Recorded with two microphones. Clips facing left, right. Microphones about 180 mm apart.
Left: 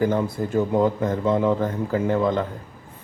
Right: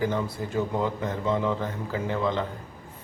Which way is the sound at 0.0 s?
45° left (ahead or behind).